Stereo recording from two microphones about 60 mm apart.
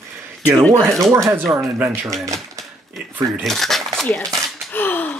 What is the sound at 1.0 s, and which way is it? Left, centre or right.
Speech, right.